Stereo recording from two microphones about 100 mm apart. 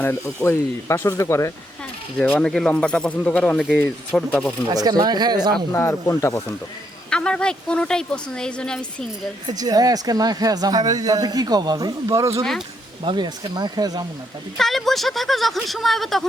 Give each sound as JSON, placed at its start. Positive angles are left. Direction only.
{"t": 0.0, "sound": "speech", "side_deg": 25}
{"t": 2.1, "sound": "speech", "side_deg": 15}
{"t": 4.7, "sound": "speech", "side_deg": -40}
{"t": 5.7, "sound": "speech", "side_deg": 25}
{"t": 7.1, "sound": "speech", "side_deg": 10}
{"t": 9.5, "sound": "speech", "side_deg": -40}
{"t": 13.1, "sound": "speech", "side_deg": -45}
{"t": 14.6, "sound": "speech", "side_deg": 5}